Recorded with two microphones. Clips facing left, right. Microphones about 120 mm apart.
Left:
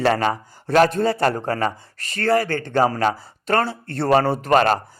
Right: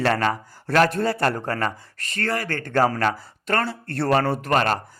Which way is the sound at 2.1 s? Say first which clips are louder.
Left 7 dB; 35° left (ahead or behind).